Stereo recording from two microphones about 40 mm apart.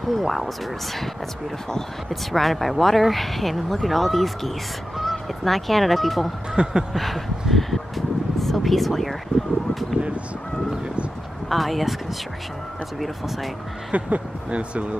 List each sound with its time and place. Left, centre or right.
0.1 s speech: centre
1.7 s speech: centre
2.4 s speech: centre
6.5 s a sound: centre
6.9 s speech: centre
11.4 s speech: centre
13.9 s speech: right